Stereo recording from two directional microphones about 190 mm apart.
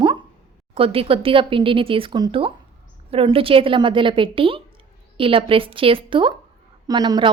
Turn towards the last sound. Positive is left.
turn(degrees=-25)  # may be behind; listen again after turning